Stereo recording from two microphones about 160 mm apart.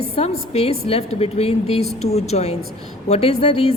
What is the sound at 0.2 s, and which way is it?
A woman's voice, 40° left (ahead or behind).